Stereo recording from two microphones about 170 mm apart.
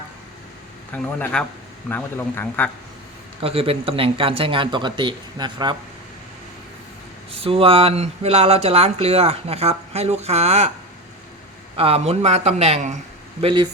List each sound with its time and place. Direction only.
1.2 s speech: 5° left (ahead or behind)
3.4 s speech: 35° right (ahead or behind)
7.4 s speech: 35° right (ahead or behind)
11.8 s speech: 35° right (ahead or behind)
13.4 s speech: 30° right (ahead or behind)